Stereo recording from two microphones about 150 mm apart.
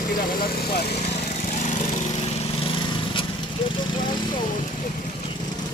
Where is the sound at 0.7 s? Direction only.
90° left.